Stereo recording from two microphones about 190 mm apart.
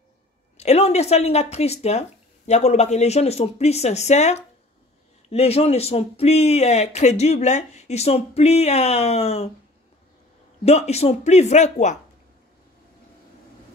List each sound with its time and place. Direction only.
0.6 s speech: 35° left (ahead or behind)
10.6 s speech: 35° left (ahead or behind)